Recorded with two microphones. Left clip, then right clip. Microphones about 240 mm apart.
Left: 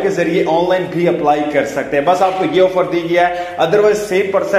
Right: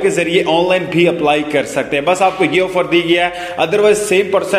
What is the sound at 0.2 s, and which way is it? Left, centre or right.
A man's voice, right.